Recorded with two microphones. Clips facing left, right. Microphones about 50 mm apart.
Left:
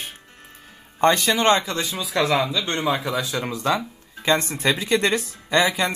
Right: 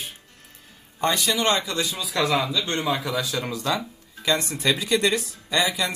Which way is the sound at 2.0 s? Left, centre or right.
Centre.